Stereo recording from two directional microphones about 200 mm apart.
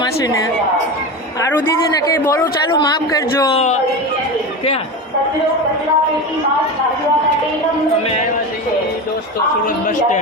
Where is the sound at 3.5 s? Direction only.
35° left (ahead or behind).